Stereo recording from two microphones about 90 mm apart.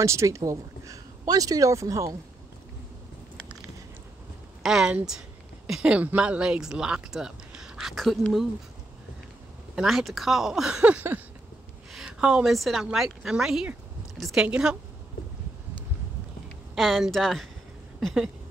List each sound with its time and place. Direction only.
0.0 s speech: 35° right (ahead or behind)
4.6 s speech: 5° right (ahead or behind)
9.8 s a woman's voice: 5° right (ahead or behind)
11.9 s a sound: 10° right (ahead or behind)
12.4 s a woman's voice: centre (ahead or behind)
16.7 s a woman's voice: centre (ahead or behind)